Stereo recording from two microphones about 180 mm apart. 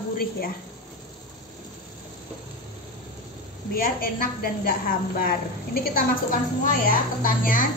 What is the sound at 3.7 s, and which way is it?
A woman's voice, 55° left (ahead or behind).